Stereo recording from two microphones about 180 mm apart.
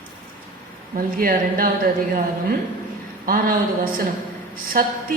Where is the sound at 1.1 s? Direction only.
55° right (ahead or behind).